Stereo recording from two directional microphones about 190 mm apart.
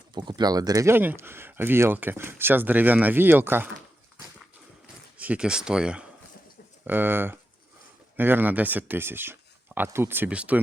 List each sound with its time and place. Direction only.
0.1 s speech: 25° right (ahead or behind)
5.1 s speech: 5° right (ahead or behind)